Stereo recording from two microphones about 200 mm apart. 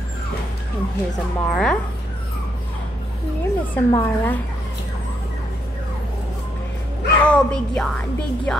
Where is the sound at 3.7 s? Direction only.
10° left (ahead or behind).